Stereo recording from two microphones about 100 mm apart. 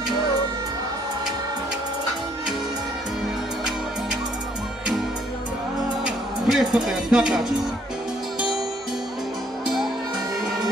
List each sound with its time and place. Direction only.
6.0 s music: 5° right (ahead or behind)